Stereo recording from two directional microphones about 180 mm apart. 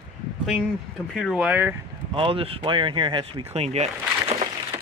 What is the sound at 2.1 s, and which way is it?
Speech, 30° right (ahead or behind).